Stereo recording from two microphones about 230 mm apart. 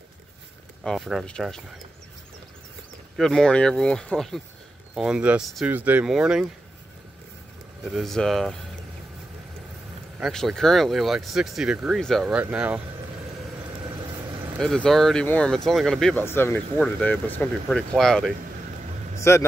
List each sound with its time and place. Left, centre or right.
0.8 s speech: centre
3.2 s speech: centre
7.8 s speech: centre
10.1 s speech: centre
13.8 s vehicle: centre
14.6 s speech: centre
19.1 s vehicle: centre